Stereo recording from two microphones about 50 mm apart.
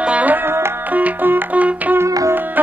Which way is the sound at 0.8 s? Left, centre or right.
Right.